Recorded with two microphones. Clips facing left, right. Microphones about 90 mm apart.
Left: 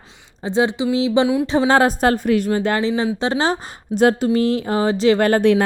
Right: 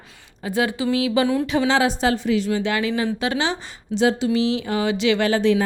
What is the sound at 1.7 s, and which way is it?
A woman's voice, 45° left (ahead or behind).